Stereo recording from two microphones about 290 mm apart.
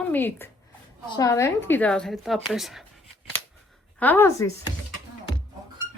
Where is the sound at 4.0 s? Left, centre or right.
Centre.